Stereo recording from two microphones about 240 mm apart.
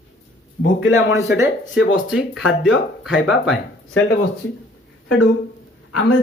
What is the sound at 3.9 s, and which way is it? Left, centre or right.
Speech, left.